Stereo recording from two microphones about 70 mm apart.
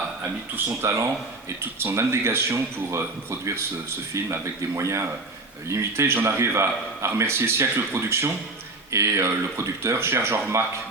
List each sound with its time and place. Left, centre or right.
0.5 s a man's voice: right